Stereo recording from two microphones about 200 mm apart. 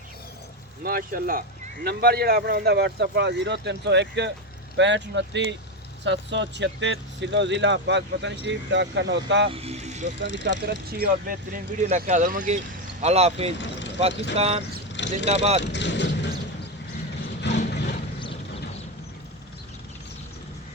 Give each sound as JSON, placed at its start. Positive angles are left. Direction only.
{"t": 0.9, "sound": "speech", "side_deg": -45}
{"t": 9.5, "sound": "speech", "side_deg": -30}
{"t": 10.5, "sound": "speech", "side_deg": -55}
{"t": 10.9, "sound": "speech", "side_deg": -45}
{"t": 14.1, "sound": "speech", "side_deg": 60}
{"t": 14.3, "sound": "speech", "side_deg": -30}
{"t": 14.9, "sound": "vehicle", "side_deg": 65}
{"t": 15.3, "sound": "speech", "side_deg": -30}
{"t": 15.6, "sound": "speech", "side_deg": 60}
{"t": 17.5, "sound": "vehicle", "side_deg": 60}
{"t": 18.2, "sound": "clip-clop", "side_deg": 25}